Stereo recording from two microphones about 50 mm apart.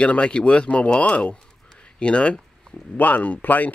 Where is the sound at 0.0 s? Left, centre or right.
Left.